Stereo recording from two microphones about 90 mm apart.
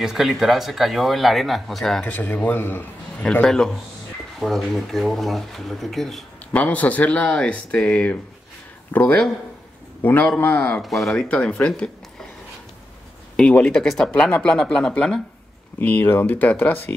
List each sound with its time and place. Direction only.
0.0 s speech: 5° right (ahead or behind)
2.0 s a man's voice: 20° left (ahead or behind)
3.3 s speech: 5° left (ahead or behind)
6.5 s a man's voice: 15° left (ahead or behind)
10.8 s speech: centre (ahead or behind)
11.2 s speech: 15° left (ahead or behind)
13.4 s speech: 10° left (ahead or behind)
15.8 s a man's voice: 20° left (ahead or behind)